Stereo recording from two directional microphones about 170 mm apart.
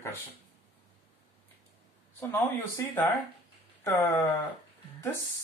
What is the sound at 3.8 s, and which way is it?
Speech, 15° left (ahead or behind).